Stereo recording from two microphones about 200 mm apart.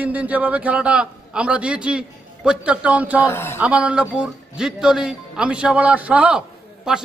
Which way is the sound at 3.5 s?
5° right (ahead or behind).